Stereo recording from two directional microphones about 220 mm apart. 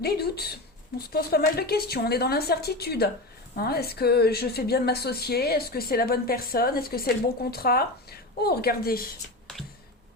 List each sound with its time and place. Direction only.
0.0 s a woman's voice: 45° left (ahead or behind)